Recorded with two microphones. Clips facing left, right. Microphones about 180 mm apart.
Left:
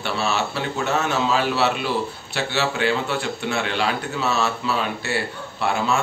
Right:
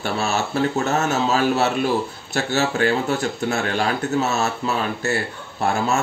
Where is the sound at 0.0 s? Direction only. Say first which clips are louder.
Right 1 dB; 45° right (ahead or behind).